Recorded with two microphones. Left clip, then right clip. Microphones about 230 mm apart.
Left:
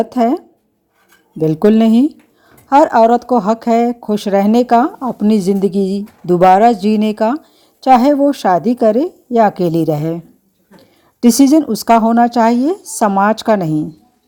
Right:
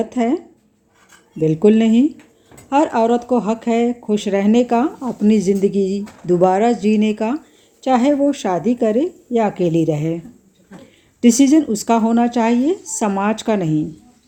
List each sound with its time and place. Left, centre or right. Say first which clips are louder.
0.0 s speech: left 5 dB; left